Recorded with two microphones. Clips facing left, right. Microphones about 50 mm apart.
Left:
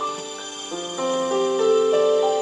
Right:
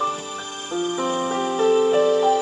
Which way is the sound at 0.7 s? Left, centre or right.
Centre.